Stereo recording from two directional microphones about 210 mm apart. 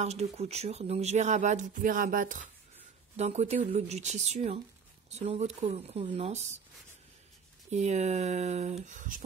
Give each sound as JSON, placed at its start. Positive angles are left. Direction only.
{"t": 0.0, "sound": "speech", "side_deg": -30}
{"t": 7.7, "sound": "speech", "side_deg": -30}